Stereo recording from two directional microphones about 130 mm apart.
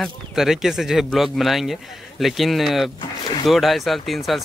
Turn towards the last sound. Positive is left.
turn(degrees=0)  # may be behind; listen again after turning